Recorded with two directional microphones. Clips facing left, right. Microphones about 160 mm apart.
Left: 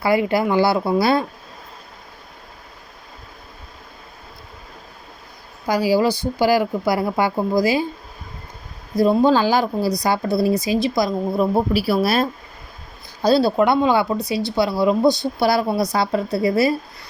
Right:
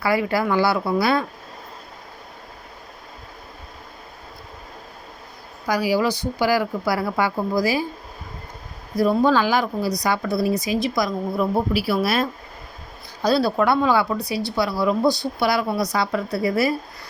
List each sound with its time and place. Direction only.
0.0 s speech: 25° left (ahead or behind)
5.6 s speech: 30° left (ahead or behind)
9.0 s speech: 25° left (ahead or behind)
15.4 s speech: 35° left (ahead or behind)